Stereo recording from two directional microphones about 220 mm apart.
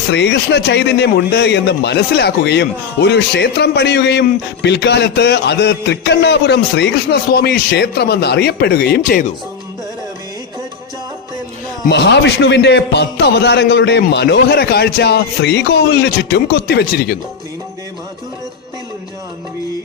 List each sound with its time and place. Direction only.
0.1 s a man's voice: 50° left (ahead or behind)
11.9 s a man's voice: 50° left (ahead or behind)